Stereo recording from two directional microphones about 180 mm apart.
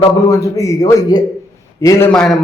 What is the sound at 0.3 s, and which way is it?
A man's voice, 15° left (ahead or behind).